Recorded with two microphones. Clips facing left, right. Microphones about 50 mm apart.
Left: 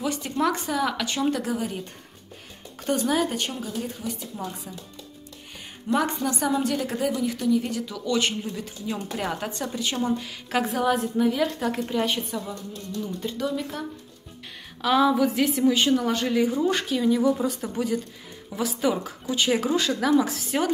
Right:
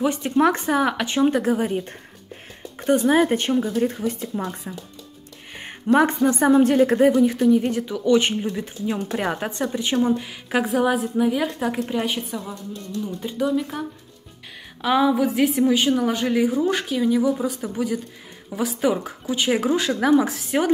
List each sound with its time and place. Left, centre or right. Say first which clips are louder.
0.0 s speech: right 6 dB; right
3.2 s a woman's voice: right 7 dB; right; by 20.7 s centre